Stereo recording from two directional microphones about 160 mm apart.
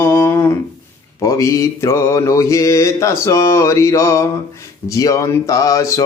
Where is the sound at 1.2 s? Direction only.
20° left (ahead or behind).